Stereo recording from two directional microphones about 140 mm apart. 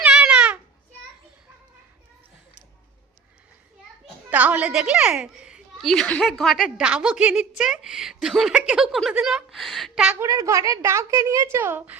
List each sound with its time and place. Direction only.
0.0 s babbling: 5° right (ahead or behind)
4.3 s a woman's voice: 10° right (ahead or behind)
10.2 s a woman's voice: 25° right (ahead or behind)